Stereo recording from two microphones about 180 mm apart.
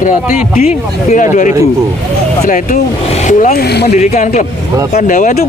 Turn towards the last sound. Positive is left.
turn(degrees=40)  # may be behind; listen again after turning